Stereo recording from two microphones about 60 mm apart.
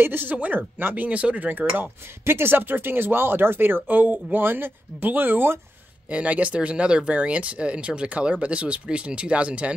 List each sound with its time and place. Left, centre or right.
0.0 s speech: right
1.8 s speech: right
6.0 s speech: right